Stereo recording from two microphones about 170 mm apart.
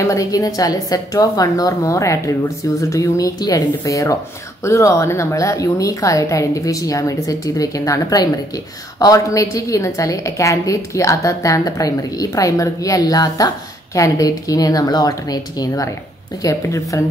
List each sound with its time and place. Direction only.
0.0 s a woman's voice: 20° left (ahead or behind)